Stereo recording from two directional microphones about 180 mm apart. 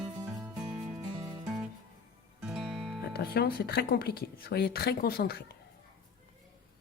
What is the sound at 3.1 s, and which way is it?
Speech, 60° left (ahead or behind).